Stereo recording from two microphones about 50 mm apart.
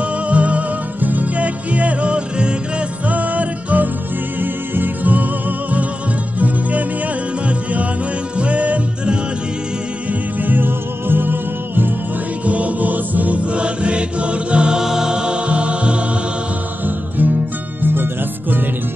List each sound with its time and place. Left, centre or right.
0.3 s music: right
3.1 s music: right
8.4 s music: right
10.4 s music: right
12.4 s music: right
16.8 s music: right